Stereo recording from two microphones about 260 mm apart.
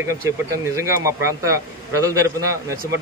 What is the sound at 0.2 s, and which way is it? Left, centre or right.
A man's voice, centre.